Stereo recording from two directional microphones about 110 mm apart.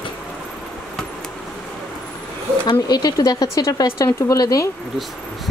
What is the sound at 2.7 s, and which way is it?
Speech, 35° left (ahead or behind).